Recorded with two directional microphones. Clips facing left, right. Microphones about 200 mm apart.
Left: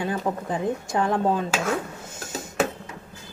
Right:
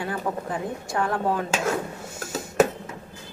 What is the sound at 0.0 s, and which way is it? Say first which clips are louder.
Speech: left 2 dB; 20° left (ahead or behind).